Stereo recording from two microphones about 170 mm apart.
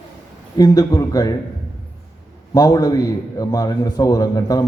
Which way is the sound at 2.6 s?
20° left (ahead or behind).